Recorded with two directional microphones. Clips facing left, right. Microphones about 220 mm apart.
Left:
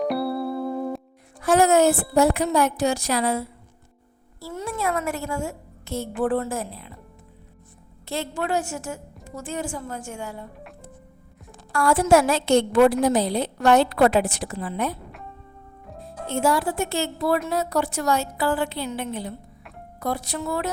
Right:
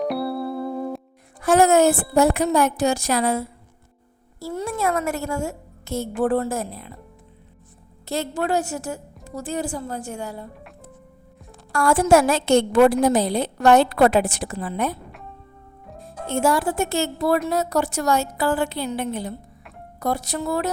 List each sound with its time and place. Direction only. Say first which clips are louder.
0.0 s music: even; centre (ahead or behind)
1.4 s a woman's voice: right 2 dB; 50° right (ahead or behind)
8.0 s a woman's voice: right 3 dB; 40° right (ahead or behind)
11.7 s a woman's voice: right 1 dB; 45° right (ahead or behind)
16.0 s a woman's voice: right 2 dB; 50° right (ahead or behind)